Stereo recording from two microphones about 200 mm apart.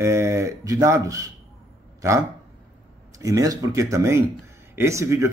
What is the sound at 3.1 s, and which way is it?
Speech, 15° right (ahead or behind).